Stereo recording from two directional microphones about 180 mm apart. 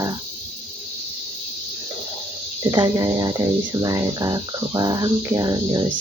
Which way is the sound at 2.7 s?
20° right (ahead or behind).